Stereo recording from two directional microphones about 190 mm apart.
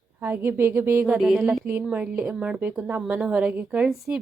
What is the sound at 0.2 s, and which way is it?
Speech, 10° right (ahead or behind).